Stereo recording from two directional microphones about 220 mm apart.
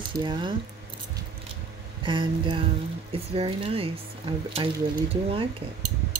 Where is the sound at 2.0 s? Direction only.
20° right (ahead or behind).